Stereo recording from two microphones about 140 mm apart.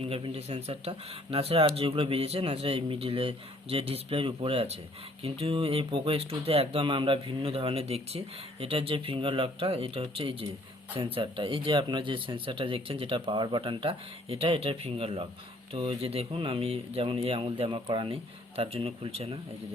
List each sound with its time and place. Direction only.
0.0 s speech: 45° right (ahead or behind)